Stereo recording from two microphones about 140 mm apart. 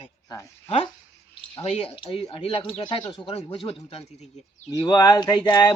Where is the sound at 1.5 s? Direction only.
45° left (ahead or behind).